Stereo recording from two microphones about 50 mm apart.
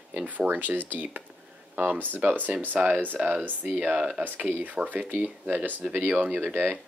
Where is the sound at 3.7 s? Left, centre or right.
Right.